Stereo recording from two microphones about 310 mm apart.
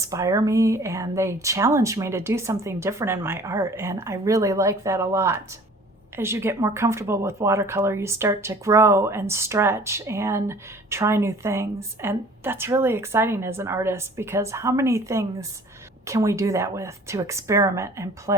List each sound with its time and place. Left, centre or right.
0.0 s speech: centre